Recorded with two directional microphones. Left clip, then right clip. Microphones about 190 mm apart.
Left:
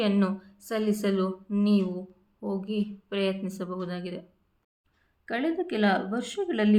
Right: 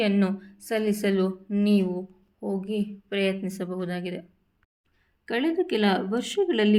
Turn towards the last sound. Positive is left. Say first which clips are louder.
# right 4 dB
turn(degrees=-20)  # may be behind; listen again after turning